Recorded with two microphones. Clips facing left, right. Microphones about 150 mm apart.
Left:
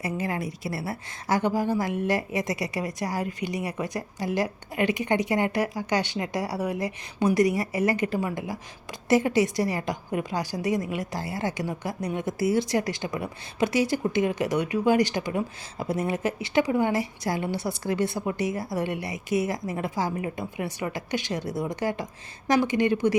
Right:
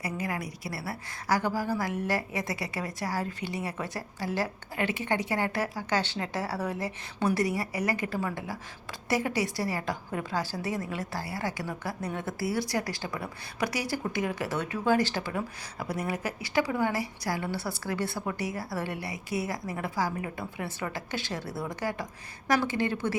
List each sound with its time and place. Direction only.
0.0 s a woman's voice: 25° left (ahead or behind)